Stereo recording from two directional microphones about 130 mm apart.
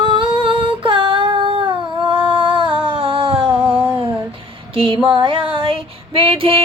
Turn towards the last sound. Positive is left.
turn(degrees=-45)  # may be behind; listen again after turning